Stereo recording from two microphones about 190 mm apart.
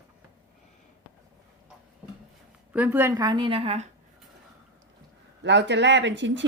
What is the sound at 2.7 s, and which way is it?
A woman's voice, 10° right (ahead or behind).